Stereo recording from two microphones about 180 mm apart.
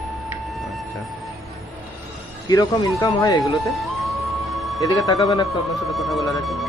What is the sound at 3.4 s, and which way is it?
Music, centre (ahead or behind).